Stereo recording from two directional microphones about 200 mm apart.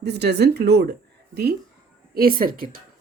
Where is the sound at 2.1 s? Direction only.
45° right (ahead or behind).